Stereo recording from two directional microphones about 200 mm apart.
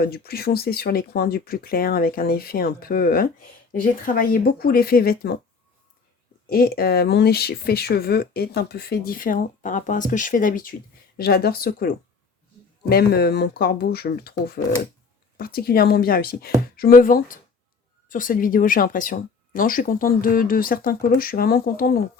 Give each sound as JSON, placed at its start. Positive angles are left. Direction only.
{"t": 0.0, "sound": "speech", "side_deg": 50}
{"t": 6.5, "sound": "speech", "side_deg": 50}